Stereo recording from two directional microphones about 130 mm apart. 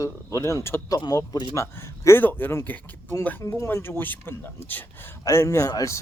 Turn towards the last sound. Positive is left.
turn(degrees=25)  # may be behind; listen again after turning